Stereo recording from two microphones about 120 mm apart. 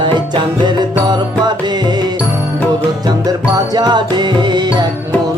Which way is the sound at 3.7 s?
40° right (ahead or behind).